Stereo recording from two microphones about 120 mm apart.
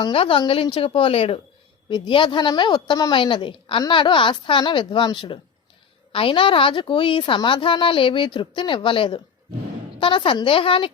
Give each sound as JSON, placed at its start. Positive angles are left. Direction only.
{"t": 0.0, "sound": "a woman's voice", "side_deg": 50}
{"t": 1.9, "sound": "a woman's voice", "side_deg": 40}